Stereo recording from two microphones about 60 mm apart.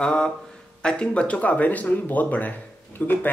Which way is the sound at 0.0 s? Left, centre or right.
Centre.